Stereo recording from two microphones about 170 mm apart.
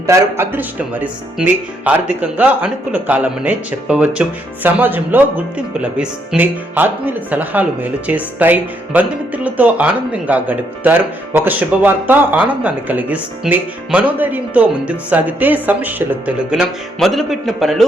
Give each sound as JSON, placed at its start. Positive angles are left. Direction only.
{"t": 0.1, "sound": "speech", "side_deg": -15}